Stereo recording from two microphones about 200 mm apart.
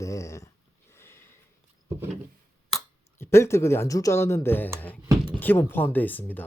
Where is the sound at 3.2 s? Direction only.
15° left (ahead or behind).